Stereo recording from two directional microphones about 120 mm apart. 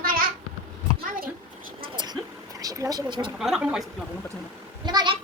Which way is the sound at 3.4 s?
5° right (ahead or behind).